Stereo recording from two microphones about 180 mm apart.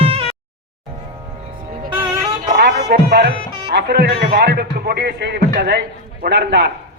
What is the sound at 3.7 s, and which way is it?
A man's voice, 65° right (ahead or behind).